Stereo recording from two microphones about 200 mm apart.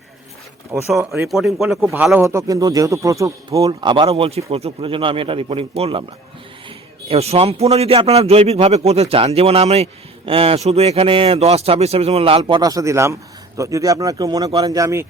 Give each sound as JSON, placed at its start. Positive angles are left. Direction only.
{"t": 0.7, "sound": "a man's voice", "side_deg": -10}
{"t": 7.1, "sound": "a man's voice", "side_deg": -30}